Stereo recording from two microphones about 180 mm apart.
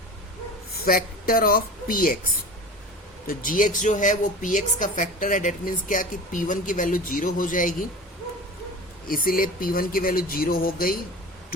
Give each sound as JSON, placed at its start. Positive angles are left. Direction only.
{"t": 0.7, "sound": "speech", "side_deg": 55}
{"t": 3.2, "sound": "a woman's voice", "side_deg": 50}
{"t": 9.0, "sound": "a woman's voice", "side_deg": 50}